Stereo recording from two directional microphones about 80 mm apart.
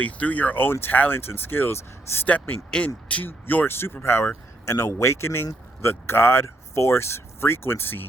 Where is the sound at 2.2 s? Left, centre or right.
Centre.